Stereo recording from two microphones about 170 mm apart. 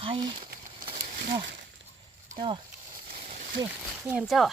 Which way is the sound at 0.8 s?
55° right (ahead or behind).